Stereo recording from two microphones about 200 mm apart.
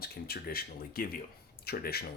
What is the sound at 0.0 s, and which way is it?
Speech, 50° left (ahead or behind).